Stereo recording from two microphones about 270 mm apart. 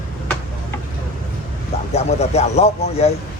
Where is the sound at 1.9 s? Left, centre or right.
Left.